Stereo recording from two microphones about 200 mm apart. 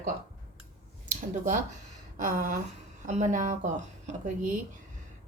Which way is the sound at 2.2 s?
40° right (ahead or behind).